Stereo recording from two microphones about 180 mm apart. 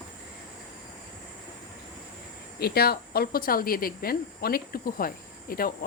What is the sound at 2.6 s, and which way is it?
Speech, 60° left (ahead or behind).